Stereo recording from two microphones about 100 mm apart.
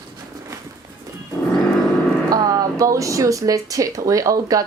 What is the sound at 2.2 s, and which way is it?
Speech, 40° right (ahead or behind).